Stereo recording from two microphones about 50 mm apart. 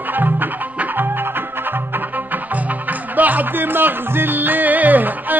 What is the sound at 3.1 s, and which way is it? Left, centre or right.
Music, right.